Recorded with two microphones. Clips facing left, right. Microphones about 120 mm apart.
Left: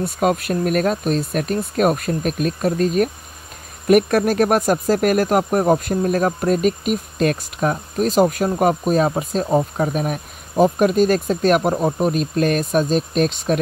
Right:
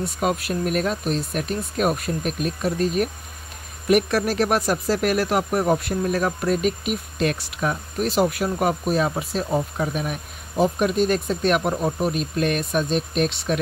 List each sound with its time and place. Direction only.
0.0 s speech: 50° left (ahead or behind); by 13.6 s 35° left (ahead or behind)